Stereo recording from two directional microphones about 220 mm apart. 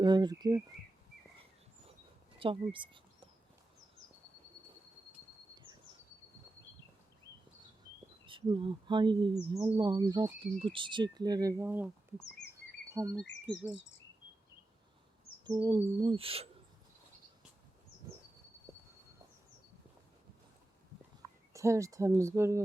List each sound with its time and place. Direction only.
0.0 s speech: 20° right (ahead or behind)
2.4 s speech: 25° right (ahead or behind)
8.3 s speech: 20° right (ahead or behind)
15.4 s speech: 20° right (ahead or behind)
21.2 s speech: 15° right (ahead or behind)